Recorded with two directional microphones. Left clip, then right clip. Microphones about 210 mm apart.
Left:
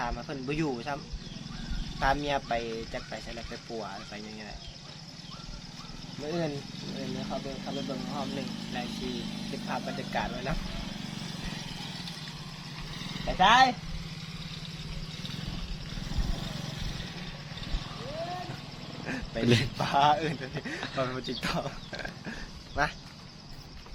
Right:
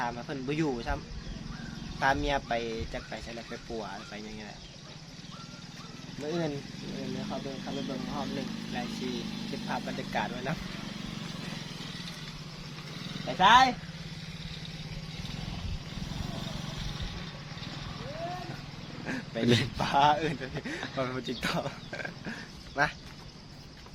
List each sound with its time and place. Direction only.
0.0 s speech: centre (ahead or behind)
6.2 s speech: centre (ahead or behind)
13.1 s a sound: 40° left (ahead or behind)
13.4 s speech: 5° left (ahead or behind)
15.5 s vehicle: 50° left (ahead or behind)
19.0 s a man's voice: centre (ahead or behind)